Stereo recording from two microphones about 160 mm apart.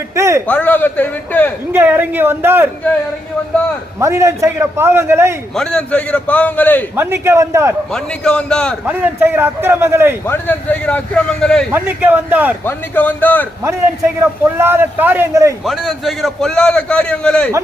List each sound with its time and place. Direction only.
0.2 s a man's voice: 15° right (ahead or behind)
0.4 s a man's voice: 10° left (ahead or behind)
1.7 s a man's voice: 10° right (ahead or behind)
4.0 s a man's voice: 15° right (ahead or behind)
5.5 s a man's voice: 5° left (ahead or behind)
6.9 s a man's voice: 15° right (ahead or behind)
7.9 s a man's voice: 5° left (ahead or behind)
8.9 s a man's voice: 10° right (ahead or behind)
10.2 s a man's voice: 15° left (ahead or behind)
11.7 s a man's voice: 10° right (ahead or behind)
12.6 s a man's voice: 10° left (ahead or behind)
14.2 s a man's voice: 15° right (ahead or behind)
15.6 s a man's voice: centre (ahead or behind)